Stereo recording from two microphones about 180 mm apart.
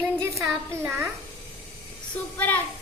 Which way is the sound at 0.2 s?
15° right (ahead or behind).